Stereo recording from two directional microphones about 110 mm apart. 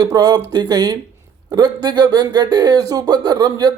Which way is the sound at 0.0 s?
35° right (ahead or behind).